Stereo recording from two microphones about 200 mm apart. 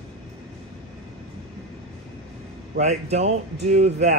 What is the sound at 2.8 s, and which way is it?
Speech, 35° right (ahead or behind).